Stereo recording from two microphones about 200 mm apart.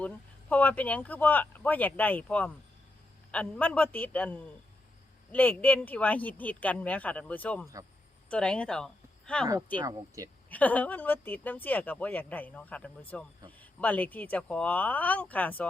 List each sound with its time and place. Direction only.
0.0 s speech: 10° left (ahead or behind)
9.7 s speech: 15° right (ahead or behind)
10.5 s speech: 10° left (ahead or behind)